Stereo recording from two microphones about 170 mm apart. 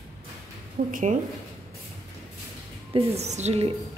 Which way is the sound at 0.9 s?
50° right (ahead or behind).